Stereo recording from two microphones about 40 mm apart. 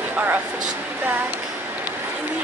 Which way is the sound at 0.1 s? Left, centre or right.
Right.